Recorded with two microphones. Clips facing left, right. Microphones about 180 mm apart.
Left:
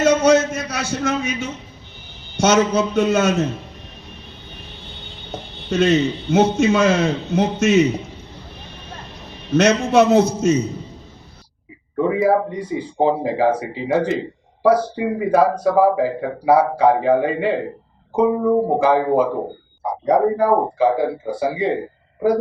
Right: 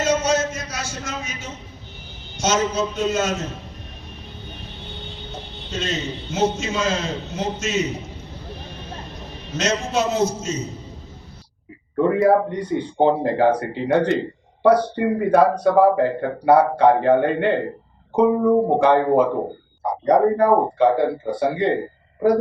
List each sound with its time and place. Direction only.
0.0 s a sound: 60° left (ahead or behind)
2.4 s a man's voice: 60° left (ahead or behind)
5.7 s a man's voice: 60° left (ahead or behind)
9.9 s a man's voice: 60° left (ahead or behind)
11.9 s speech: centre (ahead or behind)